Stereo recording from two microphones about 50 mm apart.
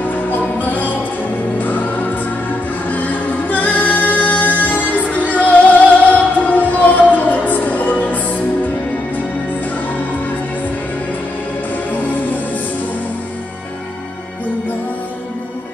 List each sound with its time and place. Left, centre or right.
0.0 s music: left